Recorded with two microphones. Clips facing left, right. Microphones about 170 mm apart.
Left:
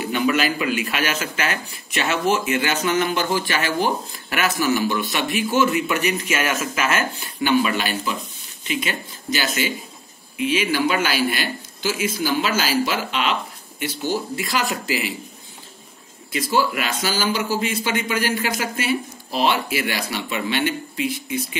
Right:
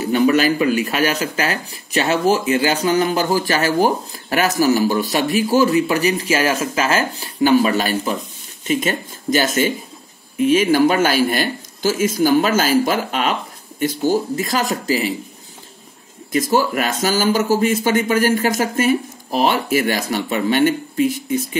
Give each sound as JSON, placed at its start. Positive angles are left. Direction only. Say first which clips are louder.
{"t": 0.0, "sound": "speech", "louder": "right 6 dB", "side_deg": -40}
{"t": 16.3, "sound": "speech", "louder": "right 4 dB", "side_deg": -45}